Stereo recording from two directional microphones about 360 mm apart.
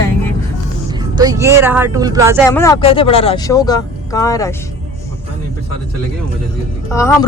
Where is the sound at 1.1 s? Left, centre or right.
Centre.